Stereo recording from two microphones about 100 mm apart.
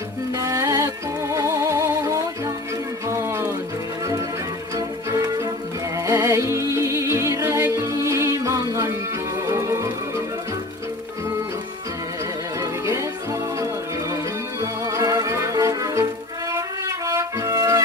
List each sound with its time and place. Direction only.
0.4 s music: 35° right (ahead or behind)
4.7 s music: 35° right (ahead or behind)
14.6 s music: 30° right (ahead or behind)